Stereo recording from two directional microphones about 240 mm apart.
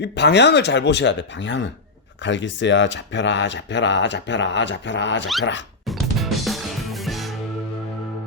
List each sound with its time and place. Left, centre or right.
0.0 s speech: left
5.9 s music: centre